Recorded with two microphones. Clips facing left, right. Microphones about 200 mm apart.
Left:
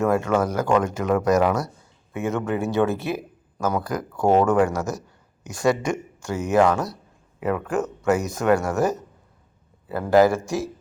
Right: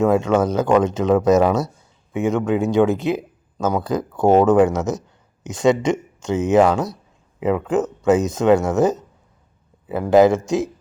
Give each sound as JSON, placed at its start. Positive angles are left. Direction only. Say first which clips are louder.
{"t": 0.0, "sound": "speech", "louder": "right 4 dB", "side_deg": -20}